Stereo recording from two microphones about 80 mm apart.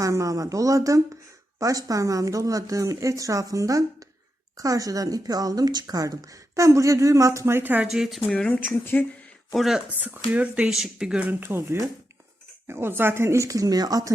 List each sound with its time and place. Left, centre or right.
0.0 s speech: right
7.9 s speech: centre
8.3 s speech: centre
8.8 s speech: left
9.5 s speech: centre
10.0 s speech: centre
10.7 s speech: centre
11.2 s speech: right